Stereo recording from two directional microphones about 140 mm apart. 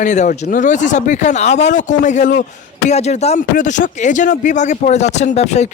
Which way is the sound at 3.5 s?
65° left (ahead or behind).